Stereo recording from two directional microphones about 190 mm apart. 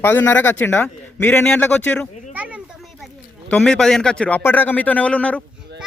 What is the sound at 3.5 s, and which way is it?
A man's voice, 5° left (ahead or behind).